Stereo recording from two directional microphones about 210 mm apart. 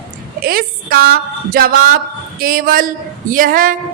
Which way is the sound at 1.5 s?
45° right (ahead or behind).